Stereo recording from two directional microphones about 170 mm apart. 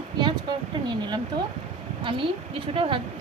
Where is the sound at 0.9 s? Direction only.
25° right (ahead or behind).